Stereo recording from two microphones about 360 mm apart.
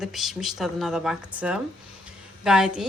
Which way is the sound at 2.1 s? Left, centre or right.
Centre.